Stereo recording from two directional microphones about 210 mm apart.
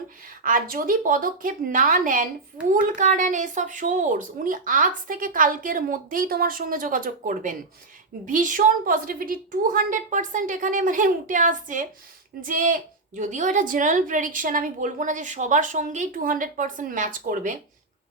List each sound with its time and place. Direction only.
0.4 s a woman's voice: 40° right (ahead or behind)